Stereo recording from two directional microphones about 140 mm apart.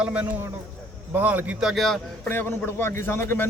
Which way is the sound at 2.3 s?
15° left (ahead or behind).